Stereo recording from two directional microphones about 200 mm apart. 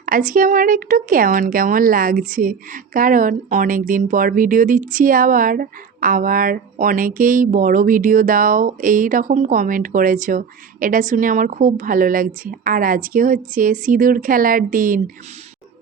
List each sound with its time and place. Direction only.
0.0 s a woman's voice: 45° right (ahead or behind)